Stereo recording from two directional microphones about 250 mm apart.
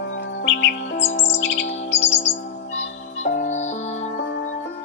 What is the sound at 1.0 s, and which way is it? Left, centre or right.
Music, left.